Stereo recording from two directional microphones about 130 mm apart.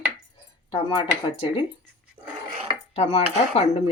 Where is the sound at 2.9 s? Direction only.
50° left (ahead or behind).